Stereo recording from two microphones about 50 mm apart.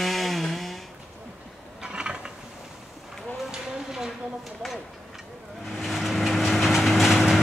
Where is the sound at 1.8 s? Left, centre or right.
Centre.